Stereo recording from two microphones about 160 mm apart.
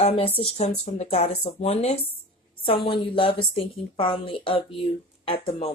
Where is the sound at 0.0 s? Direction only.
35° left (ahead or behind).